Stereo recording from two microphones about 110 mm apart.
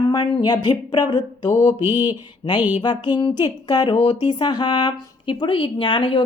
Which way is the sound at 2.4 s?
40° left (ahead or behind).